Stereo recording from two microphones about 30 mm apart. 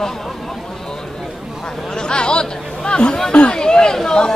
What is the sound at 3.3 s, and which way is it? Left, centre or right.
Speech, left.